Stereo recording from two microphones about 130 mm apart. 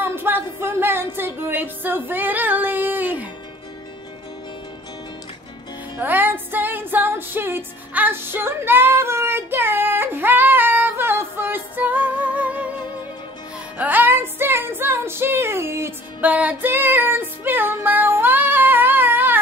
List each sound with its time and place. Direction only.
0.0 s music: 15° right (ahead or behind)
5.9 s music: 15° right (ahead or behind)
13.7 s music: 15° right (ahead or behind)